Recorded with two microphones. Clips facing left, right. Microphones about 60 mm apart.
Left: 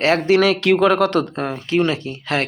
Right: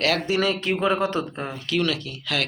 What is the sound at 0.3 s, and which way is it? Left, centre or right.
Speech, left.